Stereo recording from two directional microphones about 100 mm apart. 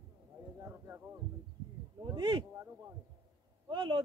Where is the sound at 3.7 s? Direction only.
50° right (ahead or behind).